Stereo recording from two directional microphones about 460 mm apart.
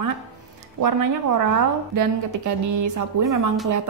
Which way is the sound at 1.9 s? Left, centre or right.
Right.